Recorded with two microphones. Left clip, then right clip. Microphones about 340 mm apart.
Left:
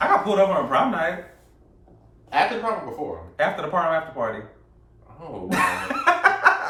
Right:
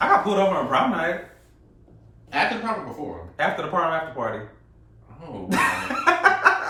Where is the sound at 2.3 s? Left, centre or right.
Centre.